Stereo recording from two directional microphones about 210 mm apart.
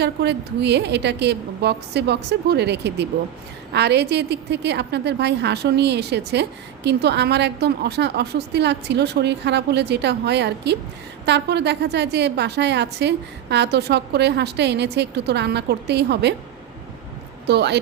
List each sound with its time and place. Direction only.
0.0 s a woman's voice: 55° right (ahead or behind)
17.4 s speech: 55° right (ahead or behind)